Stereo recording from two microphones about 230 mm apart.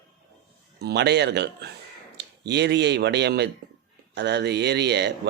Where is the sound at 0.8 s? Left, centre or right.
Right.